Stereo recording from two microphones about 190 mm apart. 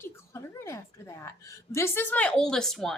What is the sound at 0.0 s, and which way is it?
A woman's voice, 15° left (ahead or behind).